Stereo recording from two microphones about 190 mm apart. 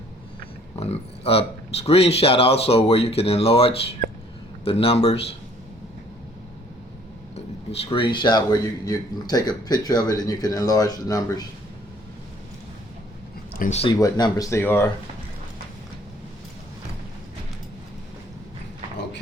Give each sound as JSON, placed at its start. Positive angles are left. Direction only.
{"t": 0.8, "sound": "speech", "side_deg": 30}
{"t": 7.3, "sound": "speech", "side_deg": 30}
{"t": 13.6, "sound": "speech", "side_deg": 35}
{"t": 13.9, "sound": "speech", "side_deg": 20}